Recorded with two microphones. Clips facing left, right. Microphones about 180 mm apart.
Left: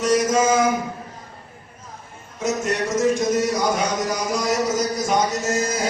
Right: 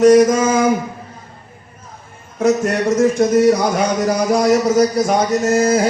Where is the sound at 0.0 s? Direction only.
60° right (ahead or behind).